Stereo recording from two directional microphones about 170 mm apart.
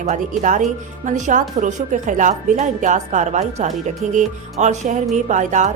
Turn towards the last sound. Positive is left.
turn(degrees=-45)  # may be behind; listen again after turning